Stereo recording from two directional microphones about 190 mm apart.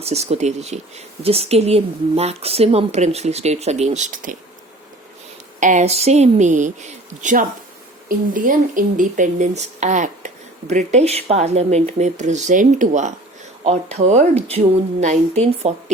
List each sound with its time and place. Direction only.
0.0 s speech: 35° right (ahead or behind)
5.5 s speech: 40° right (ahead or behind)